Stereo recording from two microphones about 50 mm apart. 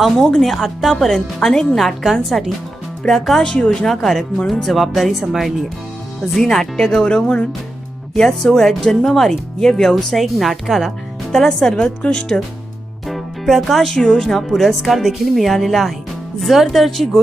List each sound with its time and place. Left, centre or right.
0.3 s speech: centre
6.3 s speech: centre
13.1 s music: centre
13.8 s speech: centre